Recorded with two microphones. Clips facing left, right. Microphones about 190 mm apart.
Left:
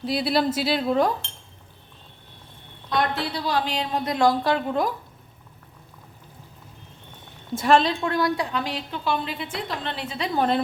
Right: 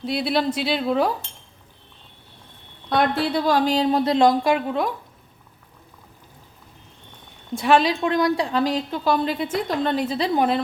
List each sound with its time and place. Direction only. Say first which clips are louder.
0.0 s speech: even; centre (ahead or behind)
2.9 s a woman's voice: right 5 dB; 50° right (ahead or behind); by 4.6 s 15° right (ahead or behind)
4.7 s speech: even; centre (ahead or behind)
7.5 s speech: right 1 dB; centre (ahead or behind)
7.8 s a woman's voice: right 3 dB; 15° right (ahead or behind)
8.5 s a woman's voice: right 7 dB; 40° right (ahead or behind)